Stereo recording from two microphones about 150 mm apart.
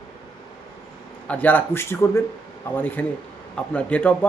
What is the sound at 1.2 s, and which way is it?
Speech, 10° left (ahead or behind).